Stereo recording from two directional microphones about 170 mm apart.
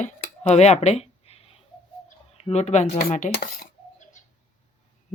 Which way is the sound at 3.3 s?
60° left (ahead or behind).